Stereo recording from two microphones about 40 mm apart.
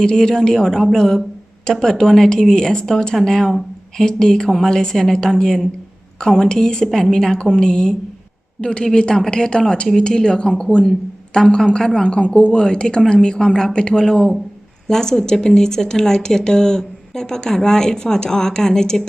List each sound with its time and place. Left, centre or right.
0.0 s a woman's voice: centre
12.0 s a woman's voice: left